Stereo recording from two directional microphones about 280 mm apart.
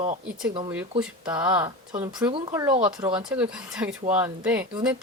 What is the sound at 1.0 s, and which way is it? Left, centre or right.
Speech, centre.